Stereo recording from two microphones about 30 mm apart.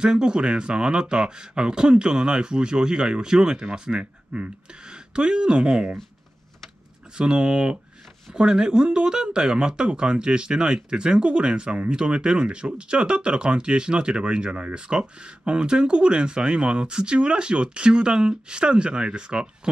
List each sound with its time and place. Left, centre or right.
0.0 s speech: right
4.0 s speech: right
4.8 s speech: right
7.2 s speech: right